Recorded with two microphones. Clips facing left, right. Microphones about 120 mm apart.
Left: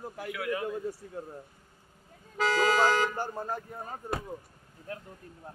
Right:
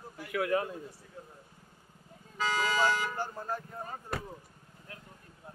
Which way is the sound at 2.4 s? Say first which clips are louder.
Left 4 dB; 90° left.